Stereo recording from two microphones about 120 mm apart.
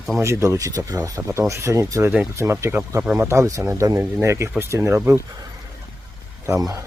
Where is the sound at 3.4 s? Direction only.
25° right (ahead or behind).